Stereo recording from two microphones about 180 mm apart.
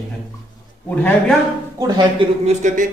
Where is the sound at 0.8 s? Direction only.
10° left (ahead or behind).